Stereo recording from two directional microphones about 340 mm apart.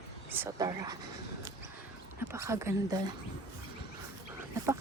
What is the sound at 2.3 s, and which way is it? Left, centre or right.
Speech, centre.